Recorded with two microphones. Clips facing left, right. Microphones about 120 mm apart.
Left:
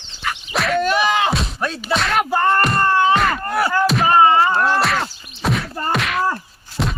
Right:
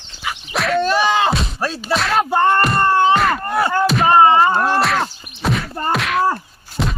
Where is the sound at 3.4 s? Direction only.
25° right (ahead or behind).